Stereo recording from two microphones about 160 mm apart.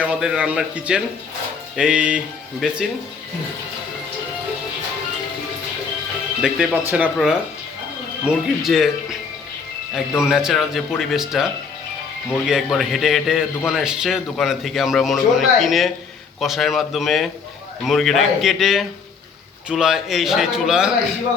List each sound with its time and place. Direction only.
0.0 s a man's voice: 5° right (ahead or behind)
6.4 s a man's voice: 5° right (ahead or behind)
12.5 s a man's voice: centre (ahead or behind)